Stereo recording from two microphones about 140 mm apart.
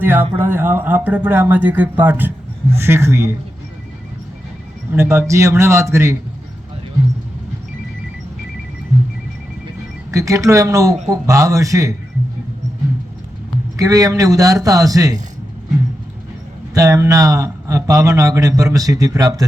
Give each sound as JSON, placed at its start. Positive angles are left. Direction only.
{"t": 0.0, "sound": "speech", "side_deg": -15}
{"t": 4.9, "sound": "speech", "side_deg": -20}
{"t": 10.1, "sound": "speech", "side_deg": -25}
{"t": 13.7, "sound": "speech", "side_deg": -25}
{"t": 16.7, "sound": "speech", "side_deg": -25}